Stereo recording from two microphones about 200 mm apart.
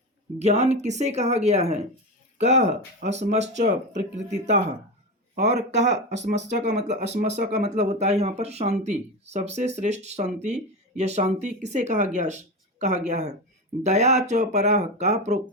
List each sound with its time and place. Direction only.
0.3 s speech: 35° right (ahead or behind)
3.0 s a man's voice: 35° right (ahead or behind)